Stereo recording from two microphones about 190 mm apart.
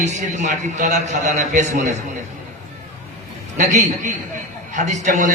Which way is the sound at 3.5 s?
40° right (ahead or behind).